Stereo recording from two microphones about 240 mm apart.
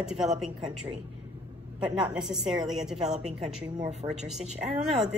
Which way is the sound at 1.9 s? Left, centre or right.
Centre.